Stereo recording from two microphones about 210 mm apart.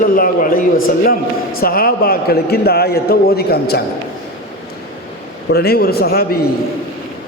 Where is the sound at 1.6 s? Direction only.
45° left (ahead or behind).